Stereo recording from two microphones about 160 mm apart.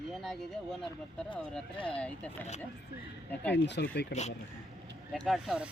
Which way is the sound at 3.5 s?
90° left.